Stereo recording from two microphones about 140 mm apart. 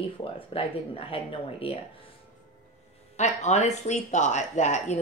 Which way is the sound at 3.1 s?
55° left (ahead or behind).